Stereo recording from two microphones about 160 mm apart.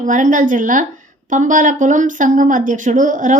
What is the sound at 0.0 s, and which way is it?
A woman's voice, 55° right (ahead or behind).